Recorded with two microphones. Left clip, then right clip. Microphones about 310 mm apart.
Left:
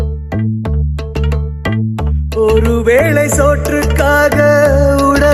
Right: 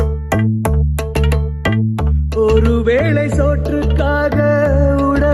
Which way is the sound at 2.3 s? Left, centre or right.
Centre.